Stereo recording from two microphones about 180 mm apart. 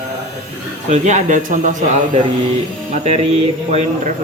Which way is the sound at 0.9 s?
40° right (ahead or behind).